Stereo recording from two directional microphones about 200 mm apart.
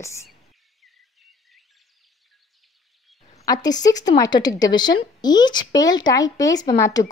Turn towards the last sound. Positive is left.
turn(degrees=15)  # may be behind; listen again after turning